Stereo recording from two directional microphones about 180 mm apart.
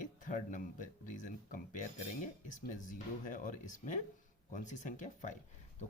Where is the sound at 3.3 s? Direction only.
45° left (ahead or behind).